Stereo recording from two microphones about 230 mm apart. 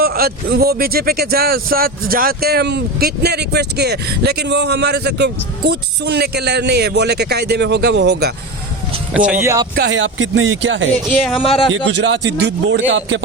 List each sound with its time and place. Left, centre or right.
0.0 s speech: right
9.1 s speech: centre
9.7 s speech: right
11.4 s a man's voice: left
11.9 s speech: right